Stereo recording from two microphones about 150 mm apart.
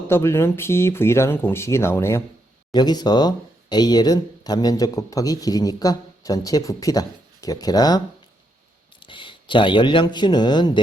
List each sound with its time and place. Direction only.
0.1 s speech: 15° left (ahead or behind)
2.7 s speech: 25° left (ahead or behind)